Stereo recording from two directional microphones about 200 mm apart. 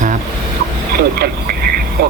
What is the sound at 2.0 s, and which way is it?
Speech, 50° right (ahead or behind).